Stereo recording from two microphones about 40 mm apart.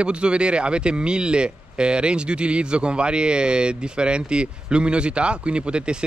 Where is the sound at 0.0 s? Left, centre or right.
Right.